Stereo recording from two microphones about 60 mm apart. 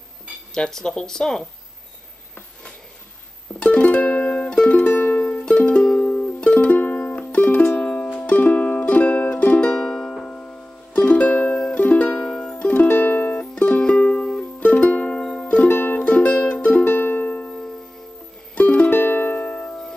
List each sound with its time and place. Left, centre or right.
0.6 s speech: centre
3.5 s music: left
12.8 s music: left
16.0 s music: left